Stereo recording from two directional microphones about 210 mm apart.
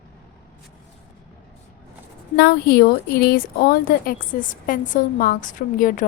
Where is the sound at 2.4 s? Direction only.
50° left (ahead or behind).